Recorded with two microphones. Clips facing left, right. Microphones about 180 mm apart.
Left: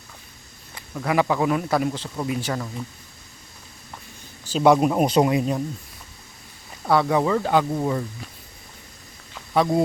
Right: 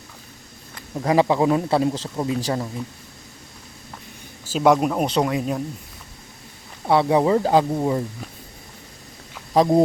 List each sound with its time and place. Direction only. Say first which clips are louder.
0.9 s speech: right 3 dB; 30° right (ahead or behind)
4.5 s speech: left 1 dB; centre (ahead or behind)
6.8 s speech: right 2 dB; 25° right (ahead or behind)
7.7 s speech: right 2 dB; 15° right (ahead or behind)
9.5 s speech: right 4 dB; 25° right (ahead or behind)